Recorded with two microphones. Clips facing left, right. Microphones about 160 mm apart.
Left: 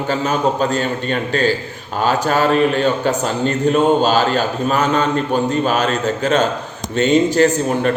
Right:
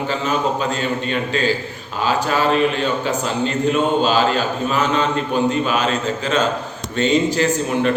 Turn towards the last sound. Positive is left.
turn(degrees=45)  # may be behind; listen again after turning